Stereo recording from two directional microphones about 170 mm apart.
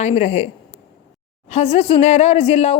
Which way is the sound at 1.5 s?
40° left (ahead or behind).